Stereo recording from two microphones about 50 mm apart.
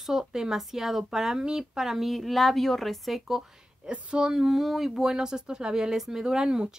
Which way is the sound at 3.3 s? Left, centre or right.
Centre.